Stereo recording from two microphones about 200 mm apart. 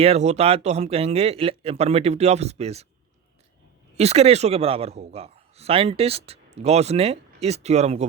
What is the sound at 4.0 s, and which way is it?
A man's voice, 30° right (ahead or behind).